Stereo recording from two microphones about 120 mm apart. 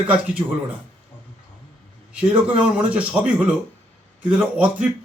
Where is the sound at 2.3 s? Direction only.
10° right (ahead or behind).